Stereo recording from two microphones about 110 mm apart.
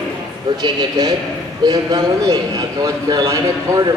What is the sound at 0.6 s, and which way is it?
A man's voice, 40° right (ahead or behind).